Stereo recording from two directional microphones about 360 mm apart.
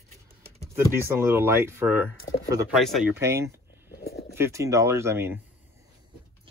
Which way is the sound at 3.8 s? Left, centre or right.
Left.